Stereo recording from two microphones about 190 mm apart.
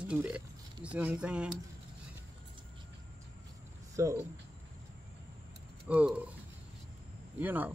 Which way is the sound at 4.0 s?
15° right (ahead or behind).